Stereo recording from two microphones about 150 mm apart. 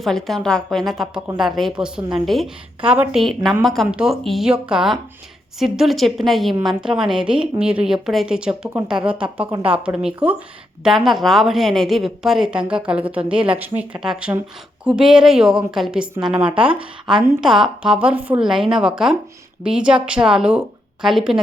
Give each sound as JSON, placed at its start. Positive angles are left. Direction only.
{"t": 0.0, "sound": "a woman's voice", "side_deg": 0}
{"t": 9.5, "sound": "speech", "side_deg": -25}
{"t": 9.7, "sound": "a woman's voice", "side_deg": -5}
{"t": 16.5, "sound": "speech", "side_deg": -35}
{"t": 17.4, "sound": "a woman's voice", "side_deg": -5}